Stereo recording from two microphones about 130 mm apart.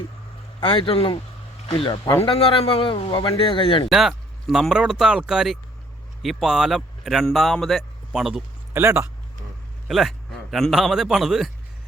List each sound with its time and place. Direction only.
0.6 s speech: 40° left (ahead or behind)
3.9 s speech: centre (ahead or behind)
8.7 s a man's voice: 20° right (ahead or behind)
9.9 s a man's voice: centre (ahead or behind)